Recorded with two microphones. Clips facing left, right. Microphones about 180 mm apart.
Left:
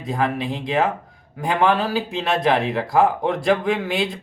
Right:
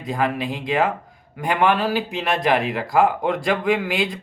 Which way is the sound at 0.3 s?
25° left (ahead or behind).